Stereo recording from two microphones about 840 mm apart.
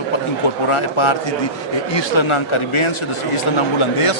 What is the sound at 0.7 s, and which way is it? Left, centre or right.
Speech, left.